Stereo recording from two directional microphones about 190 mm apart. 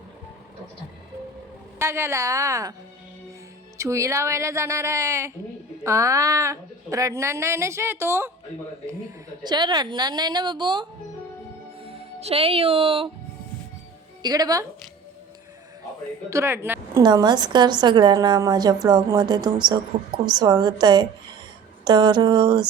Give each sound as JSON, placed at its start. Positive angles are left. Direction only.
{"t": 1.8, "sound": "speech", "side_deg": -15}
{"t": 3.8, "sound": "speech", "side_deg": -15}
{"t": 9.4, "sound": "a woman's voice", "side_deg": -25}
{"t": 11.9, "sound": "speech", "side_deg": -30}
{"t": 14.2, "sound": "a woman's voice", "side_deg": -20}
{"t": 16.3, "sound": "speech", "side_deg": -15}
{"t": 17.0, "sound": "a woman's voice", "side_deg": -20}